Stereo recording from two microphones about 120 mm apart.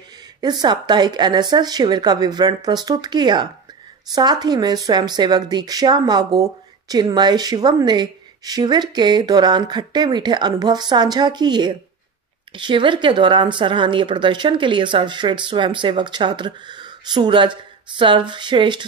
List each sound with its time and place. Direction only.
0.4 s a woman's voice: 35° right (ahead or behind)